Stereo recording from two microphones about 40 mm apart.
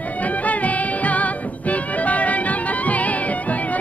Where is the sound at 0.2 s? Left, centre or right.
Left.